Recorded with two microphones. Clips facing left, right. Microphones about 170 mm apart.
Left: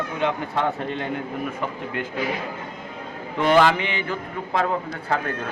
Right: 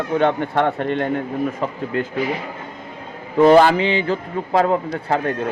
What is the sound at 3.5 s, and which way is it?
A man's voice, 35° right (ahead or behind).